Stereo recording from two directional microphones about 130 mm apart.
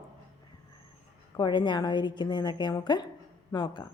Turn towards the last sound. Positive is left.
turn(degrees=30)  # may be behind; listen again after turning